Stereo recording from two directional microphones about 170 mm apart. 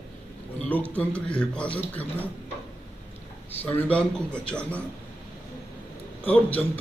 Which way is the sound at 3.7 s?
10° left (ahead or behind).